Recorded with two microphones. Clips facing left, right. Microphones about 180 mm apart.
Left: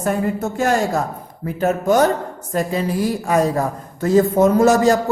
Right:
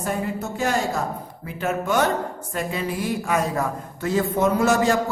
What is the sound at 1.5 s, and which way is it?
A woman's voice, 40° left (ahead or behind).